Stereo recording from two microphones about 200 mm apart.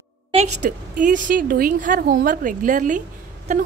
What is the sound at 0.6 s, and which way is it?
A woman's voice, 40° right (ahead or behind).